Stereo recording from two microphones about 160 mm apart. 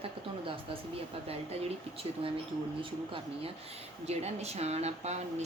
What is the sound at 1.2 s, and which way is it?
Speech, 35° right (ahead or behind).